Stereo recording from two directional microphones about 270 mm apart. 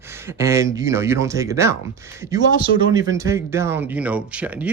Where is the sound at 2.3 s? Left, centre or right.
Left.